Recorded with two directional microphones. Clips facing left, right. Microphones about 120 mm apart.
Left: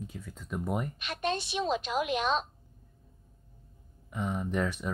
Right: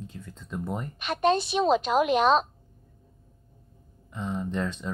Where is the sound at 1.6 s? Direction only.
90° right.